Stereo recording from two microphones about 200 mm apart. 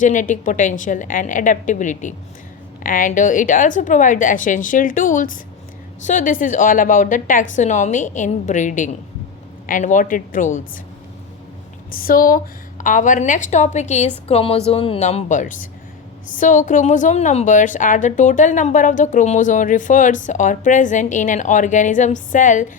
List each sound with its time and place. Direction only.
0.0 s a woman's voice: 40° left (ahead or behind)
11.9 s a woman's voice: 45° left (ahead or behind)